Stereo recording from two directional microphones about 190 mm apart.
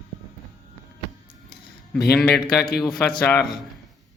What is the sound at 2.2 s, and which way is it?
Speech, 5° left (ahead or behind).